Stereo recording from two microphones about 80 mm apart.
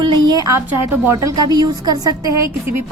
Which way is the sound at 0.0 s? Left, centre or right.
Right.